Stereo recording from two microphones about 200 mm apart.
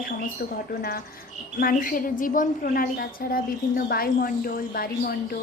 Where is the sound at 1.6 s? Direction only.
45° left (ahead or behind).